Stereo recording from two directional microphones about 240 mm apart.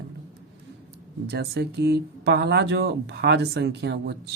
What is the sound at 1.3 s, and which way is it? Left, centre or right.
Speech, right.